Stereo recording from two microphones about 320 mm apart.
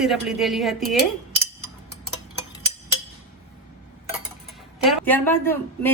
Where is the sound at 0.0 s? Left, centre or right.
Centre.